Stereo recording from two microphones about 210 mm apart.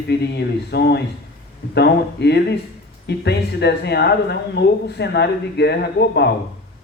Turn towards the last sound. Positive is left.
turn(degrees=50)  # may be behind; listen again after turning